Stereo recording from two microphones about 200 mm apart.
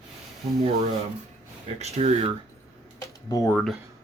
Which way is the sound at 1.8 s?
30° right (ahead or behind).